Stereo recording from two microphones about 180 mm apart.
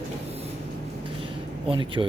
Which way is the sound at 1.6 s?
30° right (ahead or behind).